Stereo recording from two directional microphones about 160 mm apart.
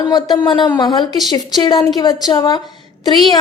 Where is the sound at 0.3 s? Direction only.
30° left (ahead or behind).